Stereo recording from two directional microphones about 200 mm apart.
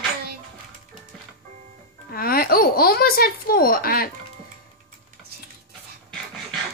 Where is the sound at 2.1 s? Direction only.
50° left (ahead or behind).